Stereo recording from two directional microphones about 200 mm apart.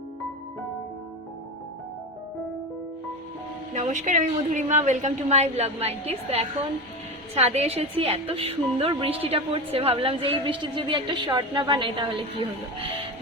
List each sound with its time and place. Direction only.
3.8 s a woman's voice: 40° right (ahead or behind)